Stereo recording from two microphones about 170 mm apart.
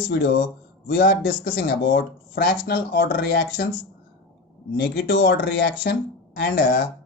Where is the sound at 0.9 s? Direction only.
60° left (ahead or behind).